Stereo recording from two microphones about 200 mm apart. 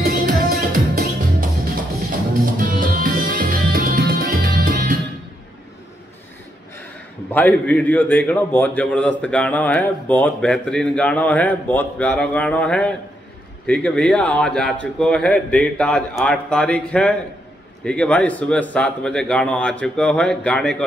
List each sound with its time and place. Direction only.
0.0 s music: 50° right (ahead or behind)
2.7 s music: 45° right (ahead or behind)
7.2 s a man's voice: 10° left (ahead or behind)